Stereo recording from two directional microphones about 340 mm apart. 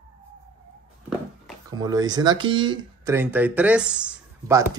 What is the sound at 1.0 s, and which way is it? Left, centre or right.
Speech, centre.